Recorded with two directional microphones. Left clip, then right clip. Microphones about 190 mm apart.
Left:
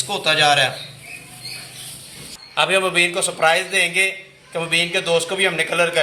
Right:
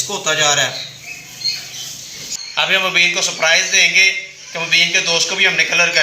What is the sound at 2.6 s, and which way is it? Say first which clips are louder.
A man's voice: right 3 dB; 55° left (ahead or behind).